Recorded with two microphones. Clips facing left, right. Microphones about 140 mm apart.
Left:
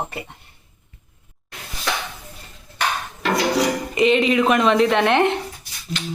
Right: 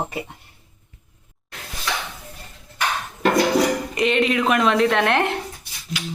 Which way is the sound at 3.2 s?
50° right (ahead or behind).